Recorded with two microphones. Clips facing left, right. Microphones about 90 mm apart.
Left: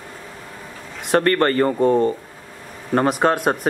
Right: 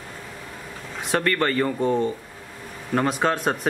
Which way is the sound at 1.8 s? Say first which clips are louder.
Left 7 dB; centre (ahead or behind).